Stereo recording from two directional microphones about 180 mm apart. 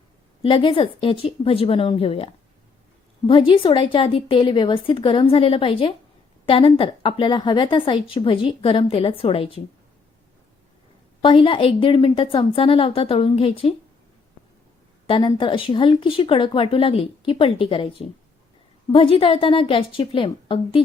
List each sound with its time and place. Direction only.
0.4 s speech: 30° left (ahead or behind)
11.2 s speech: 30° left (ahead or behind)
15.0 s speech: 30° left (ahead or behind)